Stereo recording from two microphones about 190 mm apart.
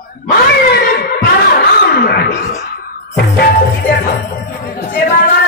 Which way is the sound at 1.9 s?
55° left (ahead or behind).